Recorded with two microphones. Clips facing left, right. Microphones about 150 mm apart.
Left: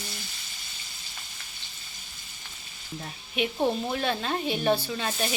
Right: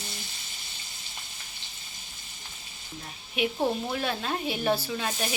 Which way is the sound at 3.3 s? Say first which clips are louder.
Left 1 dB; 5° right (ahead or behind).